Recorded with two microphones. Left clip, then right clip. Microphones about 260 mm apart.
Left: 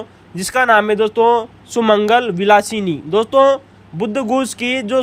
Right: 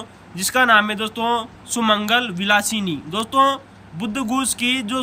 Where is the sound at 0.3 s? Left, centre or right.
Centre.